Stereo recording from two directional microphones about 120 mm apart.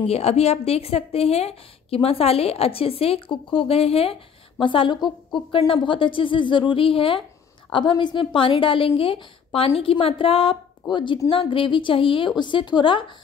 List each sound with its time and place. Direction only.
0.0 s a woman's voice: 60° left (ahead or behind); by 13.0 s 40° left (ahead or behind)